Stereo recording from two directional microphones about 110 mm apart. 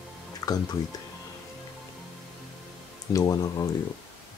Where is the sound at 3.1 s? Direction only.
35° left (ahead or behind).